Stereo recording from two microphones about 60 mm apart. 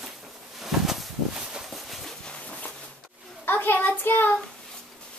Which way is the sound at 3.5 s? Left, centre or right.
Left.